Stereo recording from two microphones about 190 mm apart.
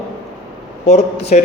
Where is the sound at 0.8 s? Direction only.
35° left (ahead or behind).